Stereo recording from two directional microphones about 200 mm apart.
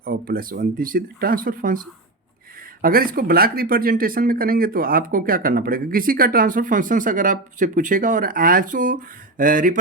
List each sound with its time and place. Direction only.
0.0 s speech: 45° right (ahead or behind)
2.8 s speech: 45° right (ahead or behind)